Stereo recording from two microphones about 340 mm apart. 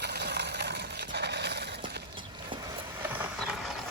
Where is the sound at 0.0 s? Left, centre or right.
Right.